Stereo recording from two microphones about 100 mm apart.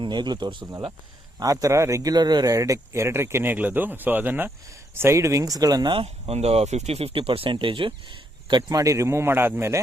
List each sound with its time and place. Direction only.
0.0 s speech: 50° right (ahead or behind)
5.9 s speech: 75° right (ahead or behind); by 8.8 s 50° right (ahead or behind)
8.8 s speech: 30° right (ahead or behind)